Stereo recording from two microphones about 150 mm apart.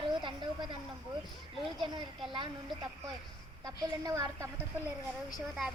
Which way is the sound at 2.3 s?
30° right (ahead or behind).